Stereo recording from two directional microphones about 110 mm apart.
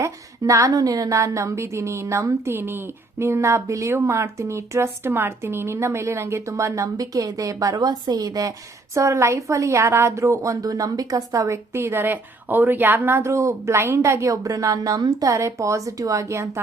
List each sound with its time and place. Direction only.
0.0 s a woman's voice: 30° right (ahead or behind)